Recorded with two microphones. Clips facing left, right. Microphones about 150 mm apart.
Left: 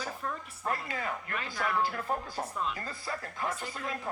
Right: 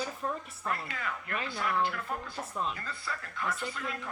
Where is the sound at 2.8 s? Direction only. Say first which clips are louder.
Left 2 dB; 30° left (ahead or behind).